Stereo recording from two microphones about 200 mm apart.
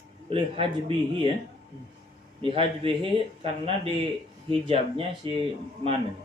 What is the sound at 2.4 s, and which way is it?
Speech, 25° right (ahead or behind).